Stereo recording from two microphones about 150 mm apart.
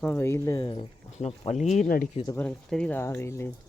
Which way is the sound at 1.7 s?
70° left (ahead or behind).